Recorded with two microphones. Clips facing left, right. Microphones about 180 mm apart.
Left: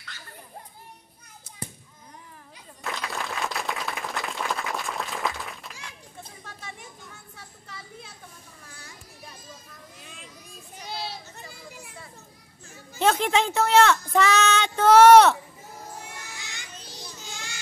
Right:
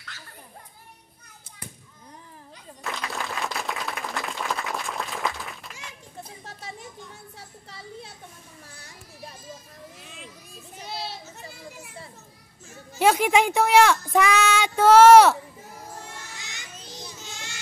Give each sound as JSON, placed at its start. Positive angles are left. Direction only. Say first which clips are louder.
{"t": 2.8, "sound": "applause", "louder": "even", "side_deg": 0}
{"t": 7.3, "sound": "a sound", "louder": "right 1 dB", "side_deg": -35}
{"t": 9.9, "sound": "children playing", "louder": "right 2 dB", "side_deg": 0}
{"t": 12.6, "sound": "speech", "louder": "right 2 dB", "side_deg": -5}
{"t": 13.9, "sound": "child singing", "louder": "right 1 dB", "side_deg": -10}
{"t": 16.3, "sound": "a sound", "louder": "even", "side_deg": -20}